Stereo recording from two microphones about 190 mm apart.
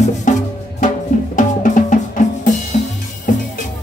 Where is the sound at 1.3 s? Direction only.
45° left (ahead or behind).